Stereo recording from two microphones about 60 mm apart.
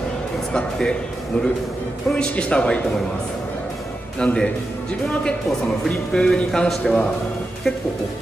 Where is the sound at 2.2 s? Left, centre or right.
Centre.